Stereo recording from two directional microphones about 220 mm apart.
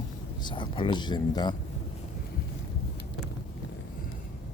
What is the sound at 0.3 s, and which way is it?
Speech, 20° left (ahead or behind).